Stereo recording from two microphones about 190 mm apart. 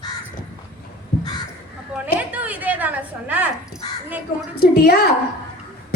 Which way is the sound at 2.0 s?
10° right (ahead or behind).